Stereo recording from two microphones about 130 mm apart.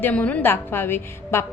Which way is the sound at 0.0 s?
10° left (ahead or behind).